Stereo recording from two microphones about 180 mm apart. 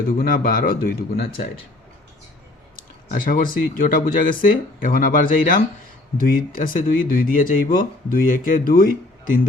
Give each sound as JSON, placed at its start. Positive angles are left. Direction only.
{"t": 0.2, "sound": "speech", "side_deg": 50}
{"t": 2.7, "sound": "speech", "side_deg": 50}